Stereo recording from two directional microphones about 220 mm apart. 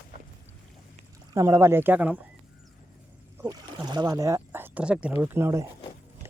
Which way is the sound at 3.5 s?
15° right (ahead or behind).